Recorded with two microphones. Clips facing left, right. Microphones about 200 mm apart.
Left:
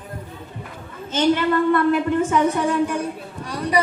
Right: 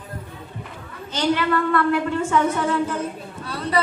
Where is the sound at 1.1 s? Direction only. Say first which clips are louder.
Left 3 dB; 25° left (ahead or behind).